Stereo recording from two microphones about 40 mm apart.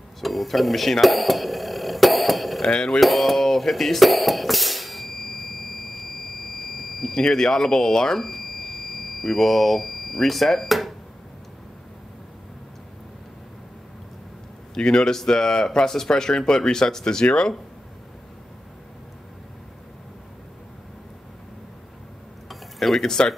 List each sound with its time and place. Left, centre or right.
0.2 s speech: centre
1.0 s a sound: centre
2.6 s speech: centre
3.0 s a sound: centre
6.6 s speech: centre
14.7 s a man's voice: left
22.5 s tick-tock: centre
23.0 s speech: centre